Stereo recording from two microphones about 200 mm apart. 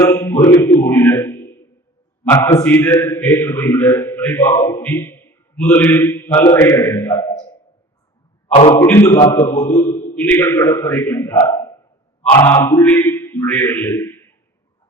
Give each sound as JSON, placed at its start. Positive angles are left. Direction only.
{"t": 0.0, "sound": "speech", "side_deg": 15}
{"t": 0.8, "sound": "a sound", "side_deg": 10}
{"t": 2.2, "sound": "a man's voice", "side_deg": 15}
{"t": 8.7, "sound": "a man's voice", "side_deg": 10}